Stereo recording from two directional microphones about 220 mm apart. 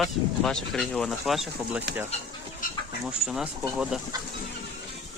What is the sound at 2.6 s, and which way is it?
Chicken, 40° left (ahead or behind).